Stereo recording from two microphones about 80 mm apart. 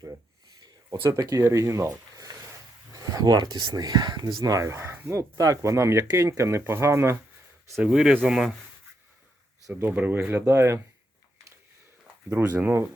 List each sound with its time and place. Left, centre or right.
0.6 s a sound: right
1.4 s speech: right
2.9 s a sound: right
3.3 s speech: right
4.4 s speech: right
5.4 s speech: right
7.9 s speech: centre
9.7 s speech: right
12.5 s speech: right